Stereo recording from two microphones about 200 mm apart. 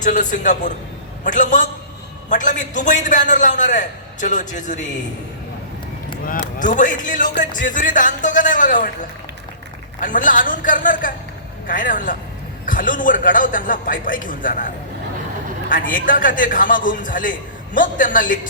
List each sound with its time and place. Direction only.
0.0 s a man's voice: 40° left (ahead or behind)
6.6 s a man's voice: 40° left (ahead or behind)
10.0 s a man's voice: 40° left (ahead or behind)
15.7 s a man's voice: 45° left (ahead or behind)